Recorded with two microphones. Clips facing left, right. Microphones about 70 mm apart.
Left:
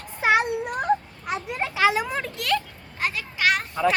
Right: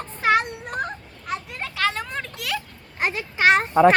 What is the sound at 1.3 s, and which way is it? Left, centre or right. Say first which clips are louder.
Children playing: left 3 dB; centre.